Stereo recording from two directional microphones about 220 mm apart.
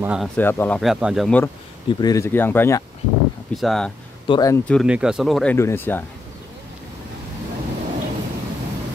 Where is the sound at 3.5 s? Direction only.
Centre (ahead or behind).